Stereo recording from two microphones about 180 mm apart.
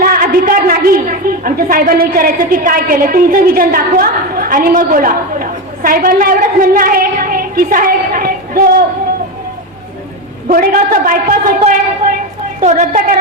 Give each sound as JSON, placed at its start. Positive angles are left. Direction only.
{"t": 0.0, "sound": "a woman's voice", "side_deg": -55}
{"t": 10.5, "sound": "a woman's voice", "side_deg": -55}